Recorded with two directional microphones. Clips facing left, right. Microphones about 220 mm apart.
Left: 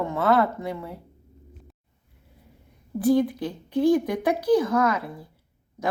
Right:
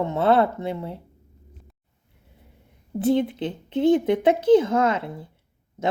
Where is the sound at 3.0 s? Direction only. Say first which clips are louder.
Left 1 dB; 25° right (ahead or behind).